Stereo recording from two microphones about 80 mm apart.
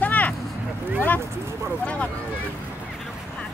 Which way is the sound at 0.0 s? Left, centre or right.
Left.